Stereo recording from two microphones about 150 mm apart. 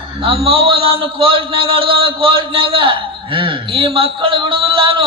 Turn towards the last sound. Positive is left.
turn(degrees=-35)  # may be behind; listen again after turning